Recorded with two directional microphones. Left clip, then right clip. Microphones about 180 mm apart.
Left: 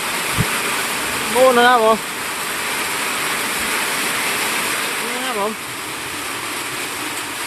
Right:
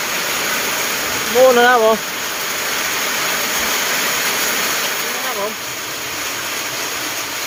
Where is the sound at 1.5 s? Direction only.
Centre (ahead or behind).